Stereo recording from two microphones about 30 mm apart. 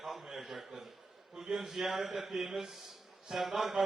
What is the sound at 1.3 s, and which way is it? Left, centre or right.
Speech, right.